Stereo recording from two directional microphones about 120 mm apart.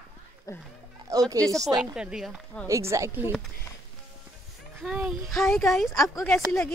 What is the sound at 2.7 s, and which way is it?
Speech, 25° right (ahead or behind).